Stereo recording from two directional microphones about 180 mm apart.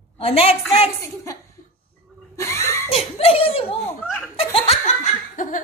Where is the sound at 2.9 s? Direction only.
35° left (ahead or behind).